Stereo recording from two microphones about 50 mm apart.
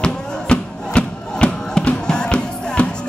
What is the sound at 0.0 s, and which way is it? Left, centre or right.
Music, centre.